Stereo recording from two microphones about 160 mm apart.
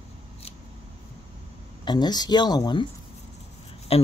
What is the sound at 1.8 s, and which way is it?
Speech, 25° left (ahead or behind).